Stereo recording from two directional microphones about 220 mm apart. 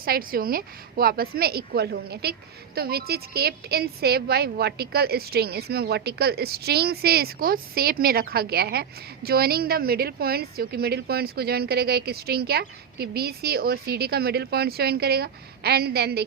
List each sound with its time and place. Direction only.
0.0 s a woman's voice: 40° right (ahead or behind)